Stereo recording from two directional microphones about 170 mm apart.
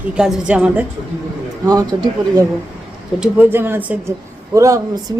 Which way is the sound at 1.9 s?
30° right (ahead or behind).